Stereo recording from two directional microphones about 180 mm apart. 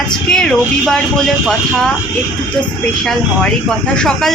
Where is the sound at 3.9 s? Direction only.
5° left (ahead or behind).